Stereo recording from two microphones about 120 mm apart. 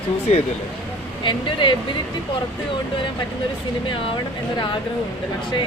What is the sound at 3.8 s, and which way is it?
Speech, 40° left (ahead or behind).